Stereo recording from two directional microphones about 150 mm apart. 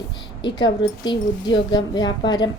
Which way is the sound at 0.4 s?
30° left (ahead or behind).